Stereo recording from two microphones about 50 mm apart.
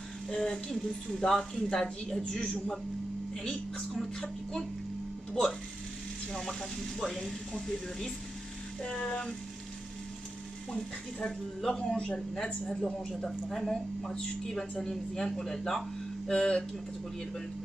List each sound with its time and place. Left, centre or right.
0.3 s speech: centre
4.2 s speech: centre
7.0 s speech: centre
8.8 s speech: centre
11.6 s speech: centre